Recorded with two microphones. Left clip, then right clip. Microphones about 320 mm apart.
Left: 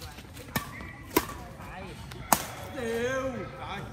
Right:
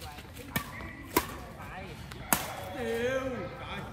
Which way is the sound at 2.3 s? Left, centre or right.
Centre.